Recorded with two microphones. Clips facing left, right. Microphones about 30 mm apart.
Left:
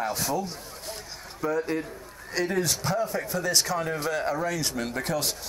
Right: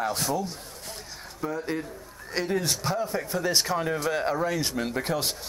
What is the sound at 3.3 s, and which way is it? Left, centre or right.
Speech, right.